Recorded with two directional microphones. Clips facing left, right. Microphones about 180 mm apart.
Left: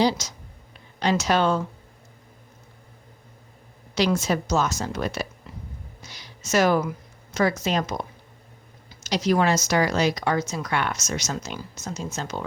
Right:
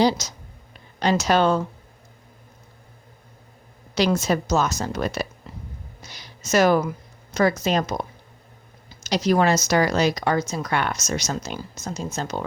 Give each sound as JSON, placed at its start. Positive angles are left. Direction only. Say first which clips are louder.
{"t": 0.9, "sound": "speech", "louder": "right 2 dB", "side_deg": -40}
{"t": 3.9, "sound": "speech", "louder": "right 2 dB", "side_deg": -40}
{"t": 6.0, "sound": "a sound", "louder": "right 1 dB", "side_deg": -40}
{"t": 7.3, "sound": "speech", "louder": "right 3 dB", "side_deg": -40}
{"t": 9.0, "sound": "speech", "louder": "right 2 dB", "side_deg": -40}